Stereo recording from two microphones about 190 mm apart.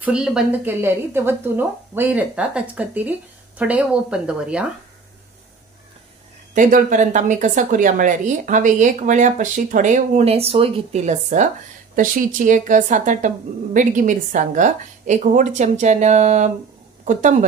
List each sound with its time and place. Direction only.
0.0 s a woman's voice: 5° right (ahead or behind)
6.5 s a woman's voice: 40° right (ahead or behind)